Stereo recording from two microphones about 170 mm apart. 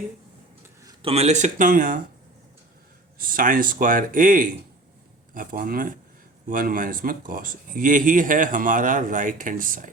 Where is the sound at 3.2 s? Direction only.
55° right (ahead or behind).